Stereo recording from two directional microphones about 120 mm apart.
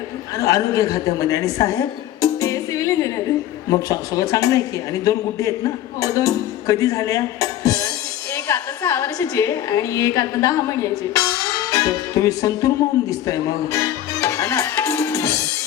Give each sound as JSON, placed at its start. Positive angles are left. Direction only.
{"t": 0.3, "sound": "a woman's voice", "side_deg": 30}
{"t": 11.7, "sound": "music", "side_deg": 30}